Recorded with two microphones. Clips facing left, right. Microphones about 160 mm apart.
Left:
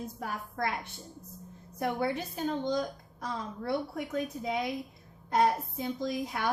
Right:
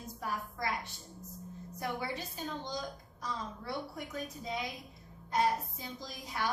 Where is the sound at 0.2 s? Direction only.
60° left (ahead or behind).